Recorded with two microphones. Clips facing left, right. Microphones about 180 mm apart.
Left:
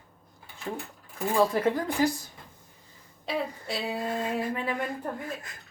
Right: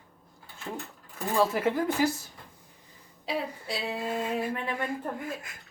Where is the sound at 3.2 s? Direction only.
Centre (ahead or behind).